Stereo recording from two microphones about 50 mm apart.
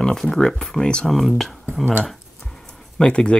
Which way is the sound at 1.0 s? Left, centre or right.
Centre.